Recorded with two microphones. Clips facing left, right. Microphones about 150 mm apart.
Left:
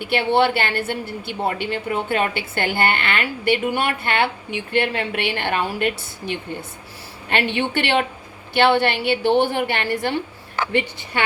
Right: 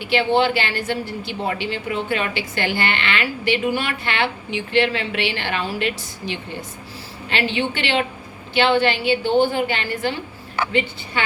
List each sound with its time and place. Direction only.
0.0 s a woman's voice: 55° left (ahead or behind)